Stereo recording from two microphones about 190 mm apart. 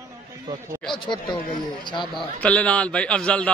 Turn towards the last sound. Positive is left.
turn(degrees=5)  # may be behind; listen again after turning